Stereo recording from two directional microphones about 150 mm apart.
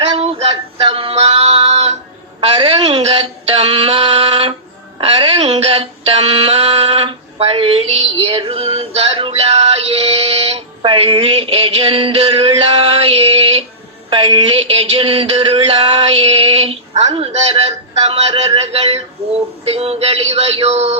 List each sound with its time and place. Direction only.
0.0 s music: 45° right (ahead or behind)
2.6 s speech: 40° right (ahead or behind)
4.9 s a sound: 40° right (ahead or behind)
19.7 s synthetic singing: 40° right (ahead or behind)